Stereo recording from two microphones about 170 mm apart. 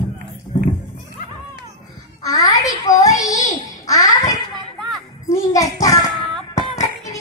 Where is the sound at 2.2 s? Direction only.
20° left (ahead or behind).